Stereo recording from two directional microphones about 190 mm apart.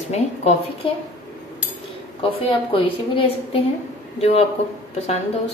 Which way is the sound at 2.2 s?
30° left (ahead or behind).